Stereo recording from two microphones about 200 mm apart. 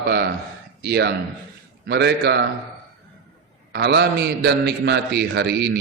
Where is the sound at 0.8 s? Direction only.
55° right (ahead or behind).